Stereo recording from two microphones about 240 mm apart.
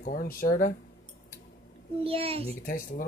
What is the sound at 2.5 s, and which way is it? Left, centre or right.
Speech, left.